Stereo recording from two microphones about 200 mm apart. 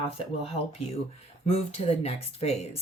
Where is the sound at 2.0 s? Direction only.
30° left (ahead or behind).